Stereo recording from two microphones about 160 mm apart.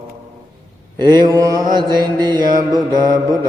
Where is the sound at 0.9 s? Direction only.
25° right (ahead or behind).